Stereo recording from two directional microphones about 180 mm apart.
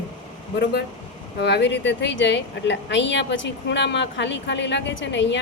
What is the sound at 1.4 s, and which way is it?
A woman's voice, 75° left (ahead or behind).